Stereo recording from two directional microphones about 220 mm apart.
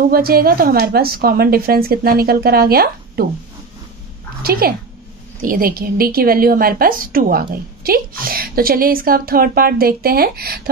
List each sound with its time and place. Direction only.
0.1 s a woman's voice: 45° right (ahead or behind)
4.4 s a woman's voice: 45° right (ahead or behind)